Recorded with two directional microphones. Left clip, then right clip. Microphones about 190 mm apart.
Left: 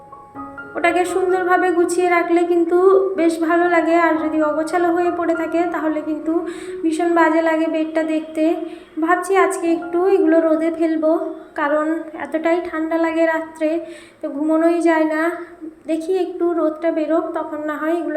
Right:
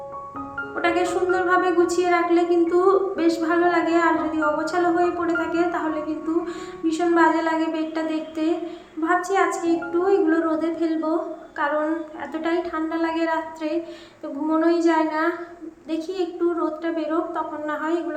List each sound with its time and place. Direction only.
0.8 s a woman's voice: 20° left (ahead or behind)